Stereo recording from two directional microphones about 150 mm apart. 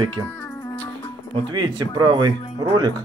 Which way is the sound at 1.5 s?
30° right (ahead or behind).